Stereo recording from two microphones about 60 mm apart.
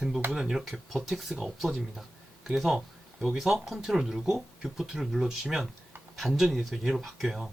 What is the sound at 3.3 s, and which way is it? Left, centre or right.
Speech, centre.